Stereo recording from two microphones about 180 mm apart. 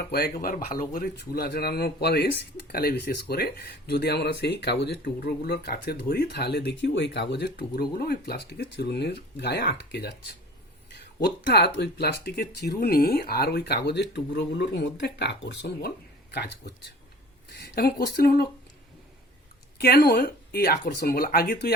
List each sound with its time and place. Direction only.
0.1 s speech: 60° left (ahead or behind)
11.4 s speech: 65° left (ahead or behind)
19.8 s speech: 60° left (ahead or behind)